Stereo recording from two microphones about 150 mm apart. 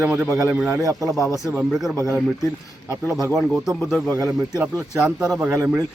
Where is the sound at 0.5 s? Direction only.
5° right (ahead or behind).